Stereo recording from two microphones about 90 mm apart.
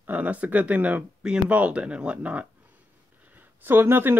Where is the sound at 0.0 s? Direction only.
20° right (ahead or behind).